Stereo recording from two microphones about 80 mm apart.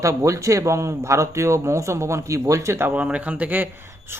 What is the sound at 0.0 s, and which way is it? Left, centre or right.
A man's voice, right.